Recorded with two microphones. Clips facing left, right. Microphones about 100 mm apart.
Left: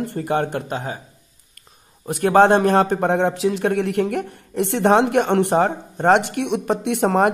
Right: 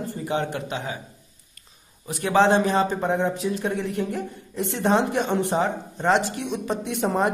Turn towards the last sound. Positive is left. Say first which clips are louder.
# left 6 dB
turn(degrees=65)  # may be behind; listen again after turning